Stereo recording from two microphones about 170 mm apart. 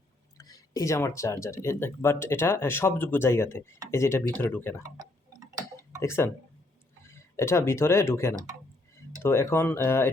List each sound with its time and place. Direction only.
0.3 s speech: 20° left (ahead or behind)
6.0 s speech: 15° left (ahead or behind)